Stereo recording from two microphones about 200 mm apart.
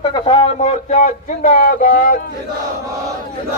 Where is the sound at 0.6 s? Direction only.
35° left (ahead or behind).